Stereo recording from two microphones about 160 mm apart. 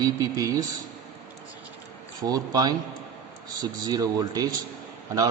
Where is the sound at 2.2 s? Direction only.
25° right (ahead or behind).